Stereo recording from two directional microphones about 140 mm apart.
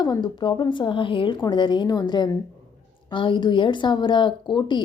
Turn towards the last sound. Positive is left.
turn(degrees=35)  # may be behind; listen again after turning